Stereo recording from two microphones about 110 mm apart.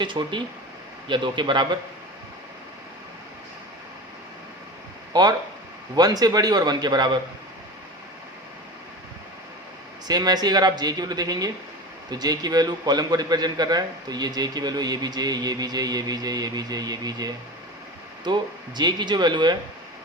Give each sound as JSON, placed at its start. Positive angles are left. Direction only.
{"t": 0.0, "sound": "a man's voice", "side_deg": -45}
{"t": 5.1, "sound": "a man's voice", "side_deg": -35}
{"t": 10.1, "sound": "a man's voice", "side_deg": -40}